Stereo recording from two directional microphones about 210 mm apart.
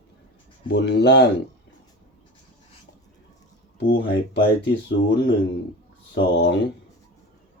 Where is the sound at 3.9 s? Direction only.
55° left (ahead or behind).